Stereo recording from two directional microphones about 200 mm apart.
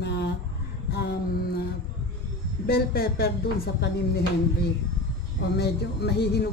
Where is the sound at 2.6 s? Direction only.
50° left (ahead or behind).